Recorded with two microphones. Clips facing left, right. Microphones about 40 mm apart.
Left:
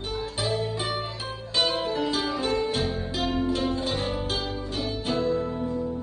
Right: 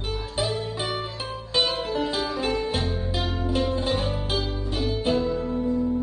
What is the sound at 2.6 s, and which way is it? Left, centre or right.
Music, right.